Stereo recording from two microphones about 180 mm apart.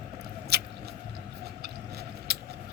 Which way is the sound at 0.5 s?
65° right (ahead or behind).